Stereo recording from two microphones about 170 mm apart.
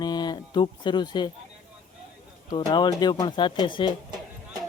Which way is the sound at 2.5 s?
30° left (ahead or behind).